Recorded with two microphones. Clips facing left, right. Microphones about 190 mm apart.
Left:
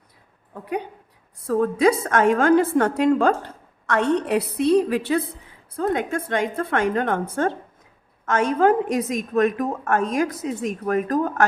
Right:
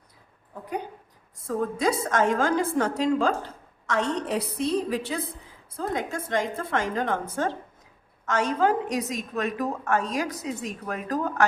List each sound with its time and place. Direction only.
1.5 s a woman's voice: 65° left (ahead or behind)